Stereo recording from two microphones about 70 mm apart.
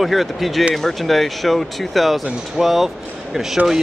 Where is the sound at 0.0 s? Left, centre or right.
Centre.